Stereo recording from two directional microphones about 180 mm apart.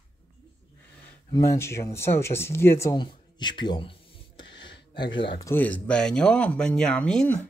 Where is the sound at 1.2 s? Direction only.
15° left (ahead or behind).